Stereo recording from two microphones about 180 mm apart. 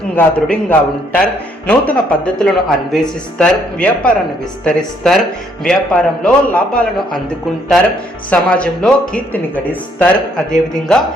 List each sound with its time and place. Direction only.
0.2 s a man's voice: 10° left (ahead or behind)